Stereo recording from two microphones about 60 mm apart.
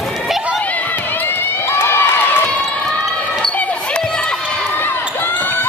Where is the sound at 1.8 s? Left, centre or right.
Left.